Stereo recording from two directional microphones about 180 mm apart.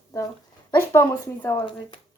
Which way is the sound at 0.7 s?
15° left (ahead or behind).